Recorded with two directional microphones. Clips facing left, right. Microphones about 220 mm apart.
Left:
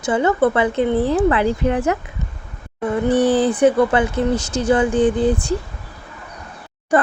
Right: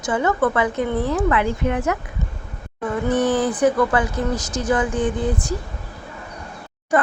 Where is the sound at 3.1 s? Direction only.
30° left (ahead or behind).